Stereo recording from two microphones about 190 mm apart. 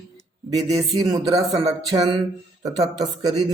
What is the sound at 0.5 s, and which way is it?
Speech, 20° right (ahead or behind).